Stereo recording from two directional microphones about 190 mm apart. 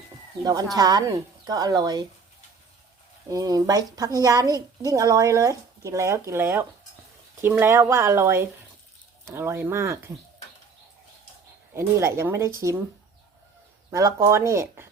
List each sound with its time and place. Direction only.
0.4 s speech: 20° right (ahead or behind)
3.2 s a woman's voice: 20° right (ahead or behind)
11.7 s a woman's voice: 15° right (ahead or behind)
13.9 s a woman's voice: 15° right (ahead or behind)